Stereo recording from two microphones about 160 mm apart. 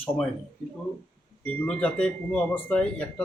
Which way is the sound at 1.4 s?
5° left (ahead or behind).